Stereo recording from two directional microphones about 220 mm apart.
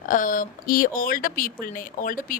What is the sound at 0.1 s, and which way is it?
A woman's voice, 35° left (ahead or behind).